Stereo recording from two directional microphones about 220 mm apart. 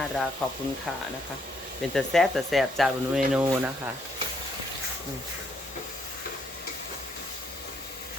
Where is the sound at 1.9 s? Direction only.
Centre (ahead or behind).